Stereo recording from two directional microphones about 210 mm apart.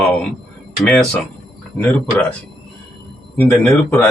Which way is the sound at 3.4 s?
10° left (ahead or behind).